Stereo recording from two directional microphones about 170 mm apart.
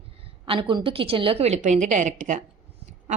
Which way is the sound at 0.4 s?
30° right (ahead or behind).